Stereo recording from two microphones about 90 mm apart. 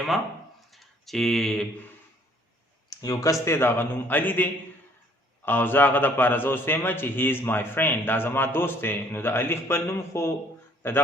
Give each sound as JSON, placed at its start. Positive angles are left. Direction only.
{"t": 0.7, "sound": "a sound", "side_deg": 0}
{"t": 3.0, "sound": "speech", "side_deg": 40}
{"t": 3.4, "sound": "a man's voice", "side_deg": 25}
{"t": 5.5, "sound": "a man's voice", "side_deg": 20}